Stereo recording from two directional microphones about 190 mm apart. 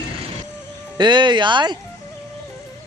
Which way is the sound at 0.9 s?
25° right (ahead or behind).